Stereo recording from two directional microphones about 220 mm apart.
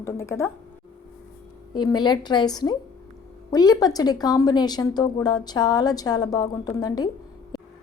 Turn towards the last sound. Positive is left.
turn(degrees=20)  # may be behind; listen again after turning